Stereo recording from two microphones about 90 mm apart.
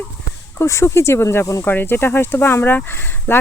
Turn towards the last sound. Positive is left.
turn(degrees=25)  # may be behind; listen again after turning